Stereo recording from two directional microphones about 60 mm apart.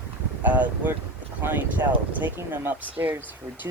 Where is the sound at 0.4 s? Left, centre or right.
Right.